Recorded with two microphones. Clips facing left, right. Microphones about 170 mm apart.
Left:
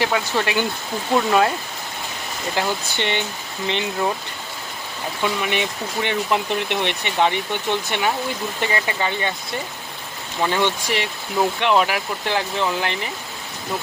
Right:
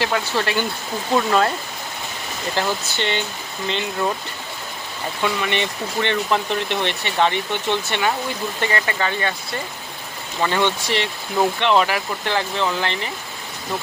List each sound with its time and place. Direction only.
0.0 s speech: 15° left (ahead or behind)
2.6 s speech: 15° left (ahead or behind)
5.4 s speech: 10° left (ahead or behind)
10.4 s speech: 10° left (ahead or behind)